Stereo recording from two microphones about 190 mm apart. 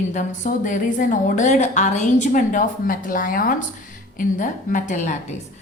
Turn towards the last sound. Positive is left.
turn(degrees=40)  # may be behind; listen again after turning